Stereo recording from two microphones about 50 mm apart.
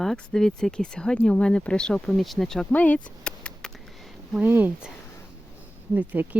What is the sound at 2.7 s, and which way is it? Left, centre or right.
Speech, left.